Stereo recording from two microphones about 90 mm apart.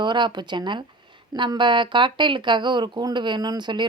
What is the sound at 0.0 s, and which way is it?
A woman's voice, 60° right (ahead or behind).